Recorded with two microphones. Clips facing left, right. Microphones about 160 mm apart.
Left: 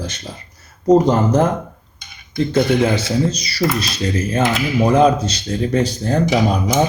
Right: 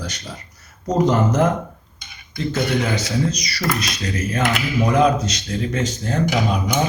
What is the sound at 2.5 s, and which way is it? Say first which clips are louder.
Speech: left 6 dB; 30° left (ahead or behind).